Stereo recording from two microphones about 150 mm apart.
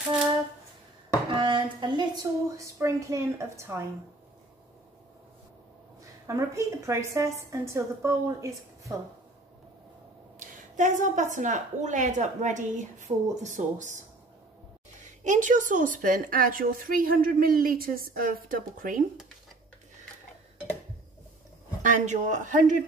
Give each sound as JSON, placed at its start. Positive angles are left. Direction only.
{"t": 1.3, "sound": "a sound", "side_deg": -35}
{"t": 2.5, "sound": "a woman's voice", "side_deg": -20}
{"t": 6.2, "sound": "a woman's voice", "side_deg": -20}
{"t": 10.4, "sound": "a woman's voice", "side_deg": -55}
{"t": 15.0, "sound": "a woman's voice", "side_deg": -55}
{"t": 21.8, "sound": "a woman's voice", "side_deg": -55}